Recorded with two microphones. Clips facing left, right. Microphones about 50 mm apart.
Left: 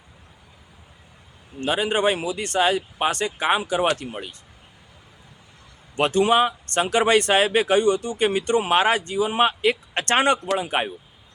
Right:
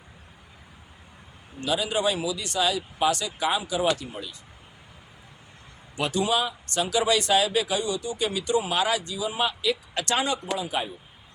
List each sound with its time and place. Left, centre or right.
1.6 s speech: left
6.0 s speech: left